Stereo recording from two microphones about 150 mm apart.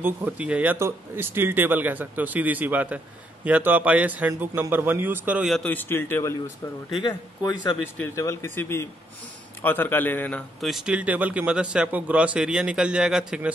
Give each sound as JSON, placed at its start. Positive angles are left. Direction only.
{"t": 0.0, "sound": "speech", "side_deg": -10}
{"t": 8.0, "sound": "a man's voice", "side_deg": 20}
{"t": 10.7, "sound": "speech", "side_deg": -5}